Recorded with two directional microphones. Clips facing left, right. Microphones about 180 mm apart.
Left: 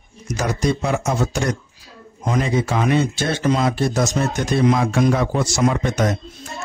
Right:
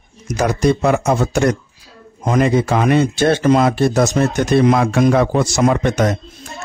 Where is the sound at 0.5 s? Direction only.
60° right (ahead or behind).